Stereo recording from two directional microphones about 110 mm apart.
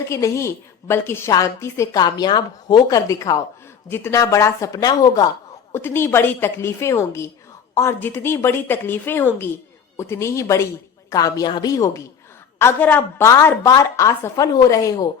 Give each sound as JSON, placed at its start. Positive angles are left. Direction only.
{"t": 0.1, "sound": "a woman's voice", "side_deg": 25}
{"t": 2.0, "sound": "speech", "side_deg": 40}
{"t": 5.7, "sound": "a woman's voice", "side_deg": 20}
{"t": 12.5, "sound": "a woman's voice", "side_deg": 20}